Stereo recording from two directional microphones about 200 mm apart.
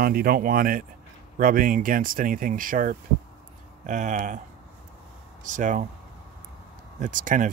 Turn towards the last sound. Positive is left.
turn(degrees=-40)  # may be behind; listen again after turning